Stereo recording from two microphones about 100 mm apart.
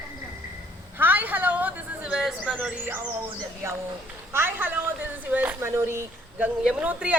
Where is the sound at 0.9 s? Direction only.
20° right (ahead or behind).